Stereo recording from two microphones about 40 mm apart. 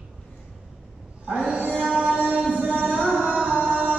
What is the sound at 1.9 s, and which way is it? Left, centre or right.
Music, right.